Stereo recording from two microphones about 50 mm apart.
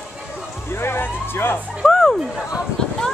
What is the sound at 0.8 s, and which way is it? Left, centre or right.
Speech, left.